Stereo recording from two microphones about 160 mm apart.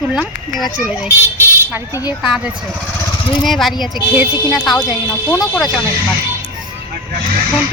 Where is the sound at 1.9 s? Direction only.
25° left (ahead or behind).